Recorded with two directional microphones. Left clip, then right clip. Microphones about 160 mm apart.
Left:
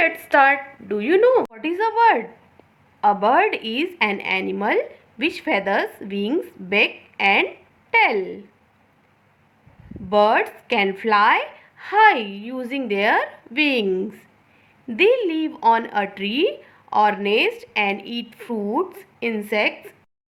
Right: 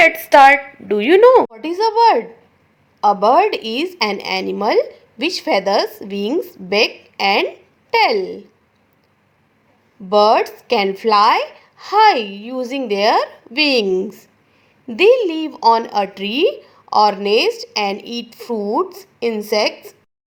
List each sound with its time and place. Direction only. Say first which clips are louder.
0.2 s a woman's voice: right 7 dB; 40° right (ahead or behind)
10.1 s a woman's voice: right 4 dB; 35° right (ahead or behind)
13.8 s a woman's voice: right 5 dB; 25° right (ahead or behind)